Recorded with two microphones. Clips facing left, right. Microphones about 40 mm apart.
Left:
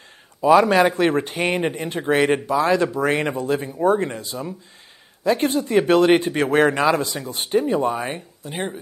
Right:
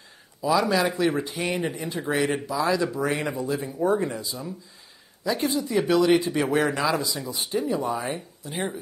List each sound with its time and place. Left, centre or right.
0.4 s speech: left